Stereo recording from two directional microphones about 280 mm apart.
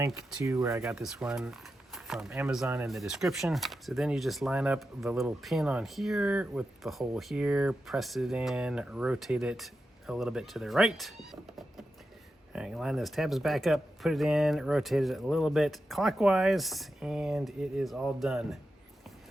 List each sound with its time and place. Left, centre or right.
0.0 s speech: centre
12.5 s speech: centre